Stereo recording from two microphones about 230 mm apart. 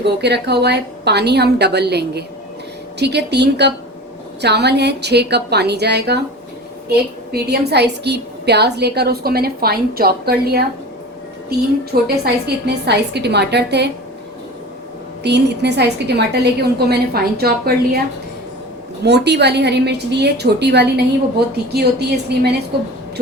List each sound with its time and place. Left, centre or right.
0.0 s a woman's voice: right
12.0 s a woman's voice: right
15.2 s a woman's voice: right
19.0 s a woman's voice: right